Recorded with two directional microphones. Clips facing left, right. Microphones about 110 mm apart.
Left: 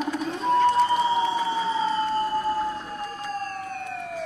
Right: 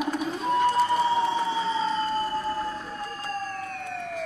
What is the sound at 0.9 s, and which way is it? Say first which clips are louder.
Emergency vehicle: left 1 dB; 15° left (ahead or behind).